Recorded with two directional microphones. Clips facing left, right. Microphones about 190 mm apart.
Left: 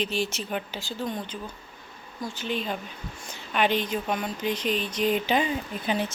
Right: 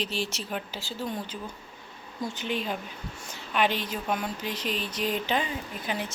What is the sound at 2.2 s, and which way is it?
Speech, 20° right (ahead or behind).